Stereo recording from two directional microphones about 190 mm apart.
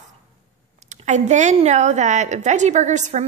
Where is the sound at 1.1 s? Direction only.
40° right (ahead or behind).